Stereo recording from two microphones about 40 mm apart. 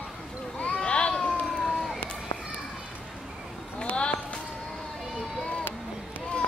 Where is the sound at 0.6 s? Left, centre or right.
Left.